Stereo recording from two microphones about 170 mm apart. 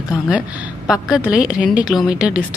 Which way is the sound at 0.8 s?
5° right (ahead or behind).